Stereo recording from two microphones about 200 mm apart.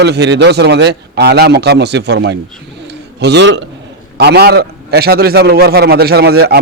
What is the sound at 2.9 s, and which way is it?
Bird, 60° right (ahead or behind).